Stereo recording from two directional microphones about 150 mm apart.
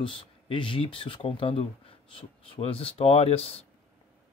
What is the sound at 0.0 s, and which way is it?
Speech, 35° left (ahead or behind).